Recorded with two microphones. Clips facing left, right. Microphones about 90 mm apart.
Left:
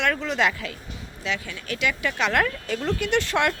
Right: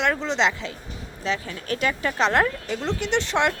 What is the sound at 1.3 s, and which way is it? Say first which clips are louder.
Speech: right 3 dB; 35° right (ahead or behind).